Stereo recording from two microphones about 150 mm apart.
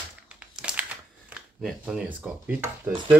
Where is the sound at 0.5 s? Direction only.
5° right (ahead or behind).